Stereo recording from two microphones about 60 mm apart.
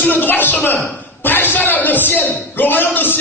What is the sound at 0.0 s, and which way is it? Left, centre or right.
A man's voice, left.